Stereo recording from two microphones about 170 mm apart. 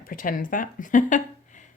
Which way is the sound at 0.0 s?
55° left (ahead or behind).